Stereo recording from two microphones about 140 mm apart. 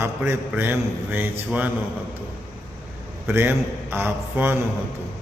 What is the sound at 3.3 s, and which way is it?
A man's voice, 15° right (ahead or behind).